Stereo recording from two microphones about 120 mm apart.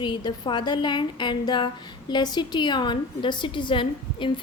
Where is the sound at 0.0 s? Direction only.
40° left (ahead or behind).